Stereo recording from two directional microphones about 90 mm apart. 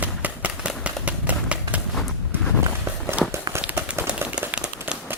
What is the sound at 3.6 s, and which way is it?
Run, 20° right (ahead or behind).